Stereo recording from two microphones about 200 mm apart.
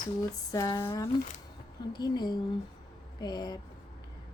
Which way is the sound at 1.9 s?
20° left (ahead or behind).